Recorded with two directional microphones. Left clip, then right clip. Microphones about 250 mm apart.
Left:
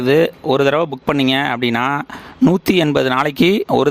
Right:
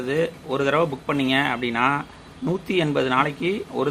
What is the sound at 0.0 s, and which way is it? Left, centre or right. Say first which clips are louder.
Speech: left 10 dB; left.